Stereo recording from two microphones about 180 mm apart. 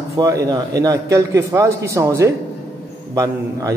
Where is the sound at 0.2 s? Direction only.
20° right (ahead or behind).